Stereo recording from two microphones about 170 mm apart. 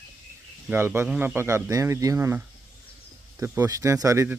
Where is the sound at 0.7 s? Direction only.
15° right (ahead or behind).